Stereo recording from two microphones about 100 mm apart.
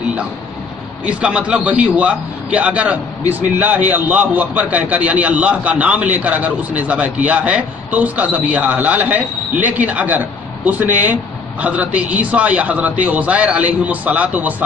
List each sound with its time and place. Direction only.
1.0 s a man's voice: 10° right (ahead or behind)